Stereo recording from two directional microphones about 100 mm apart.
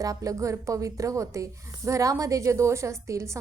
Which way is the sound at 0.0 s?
35° right (ahead or behind).